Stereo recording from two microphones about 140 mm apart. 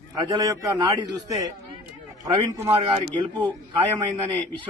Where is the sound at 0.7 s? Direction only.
30° right (ahead or behind).